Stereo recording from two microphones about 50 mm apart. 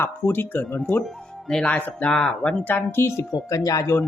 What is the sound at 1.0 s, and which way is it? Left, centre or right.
Speech, centre.